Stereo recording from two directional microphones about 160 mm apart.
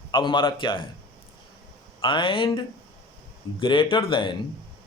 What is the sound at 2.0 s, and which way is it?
Speech, 30° left (ahead or behind).